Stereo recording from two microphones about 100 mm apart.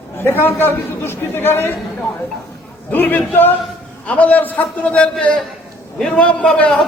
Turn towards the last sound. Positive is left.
turn(degrees=10)  # may be behind; listen again after turning